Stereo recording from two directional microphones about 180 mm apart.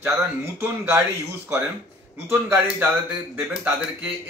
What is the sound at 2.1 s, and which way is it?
Speech, 10° right (ahead or behind).